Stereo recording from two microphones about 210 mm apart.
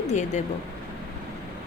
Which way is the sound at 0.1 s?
35° left (ahead or behind).